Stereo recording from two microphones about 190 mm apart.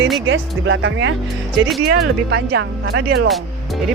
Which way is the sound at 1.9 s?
60° right (ahead or behind).